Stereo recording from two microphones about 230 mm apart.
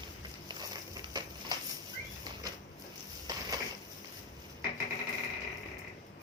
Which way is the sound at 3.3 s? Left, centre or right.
Centre.